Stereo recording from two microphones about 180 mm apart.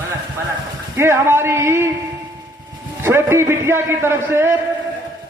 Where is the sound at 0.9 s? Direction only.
15° right (ahead or behind).